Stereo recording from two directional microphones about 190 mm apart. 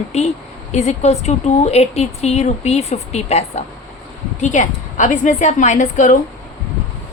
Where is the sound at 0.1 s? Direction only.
35° left (ahead or behind).